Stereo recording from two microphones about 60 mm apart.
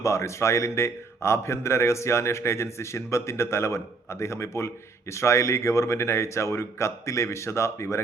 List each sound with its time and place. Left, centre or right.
0.0 s a man's voice: left